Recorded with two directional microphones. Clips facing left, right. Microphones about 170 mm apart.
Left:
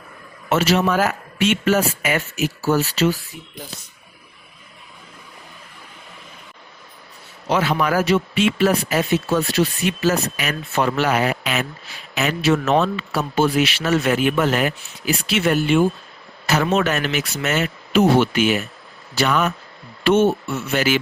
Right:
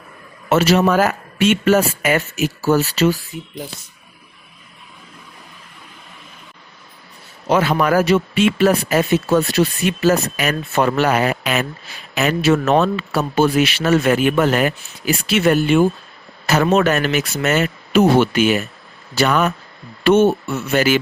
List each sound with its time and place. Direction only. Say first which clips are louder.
0.5 s speech: right 4 dB; 45° right (ahead or behind)
7.4 s speech: right 3 dB; 50° right (ahead or behind)